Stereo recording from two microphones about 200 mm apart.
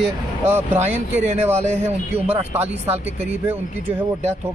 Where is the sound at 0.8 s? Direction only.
35° right (ahead or behind).